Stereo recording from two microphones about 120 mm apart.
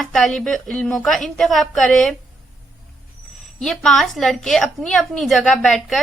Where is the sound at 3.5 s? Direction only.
5° left (ahead or behind).